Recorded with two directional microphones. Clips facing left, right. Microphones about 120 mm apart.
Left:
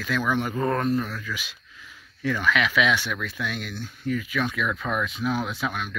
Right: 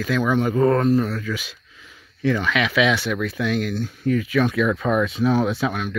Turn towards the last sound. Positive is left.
turn(degrees=-30)  # may be behind; listen again after turning